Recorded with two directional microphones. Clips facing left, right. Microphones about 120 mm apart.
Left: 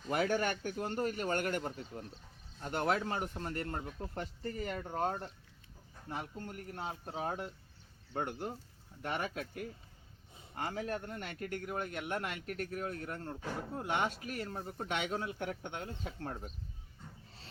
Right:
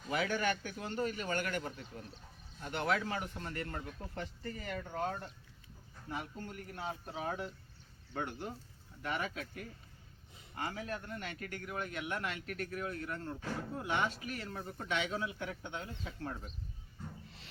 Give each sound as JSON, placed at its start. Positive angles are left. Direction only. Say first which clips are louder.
{"t": 0.1, "sound": "a man's voice", "louder": "left 2 dB", "side_deg": 45}
{"t": 10.6, "sound": "a man's voice", "louder": "left 3 dB", "side_deg": 40}
{"t": 13.4, "sound": "speech", "louder": "even", "side_deg": 15}
{"t": 13.7, "sound": "a man's voice", "louder": "left 1 dB", "side_deg": 45}